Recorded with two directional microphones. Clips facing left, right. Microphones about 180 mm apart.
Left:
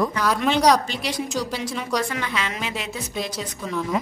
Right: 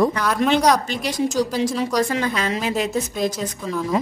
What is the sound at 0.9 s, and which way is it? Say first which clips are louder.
A woman's voice: right 4 dB; 45° right (ahead or behind).